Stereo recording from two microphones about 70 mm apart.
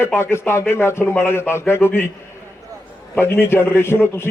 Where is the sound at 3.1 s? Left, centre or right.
Left.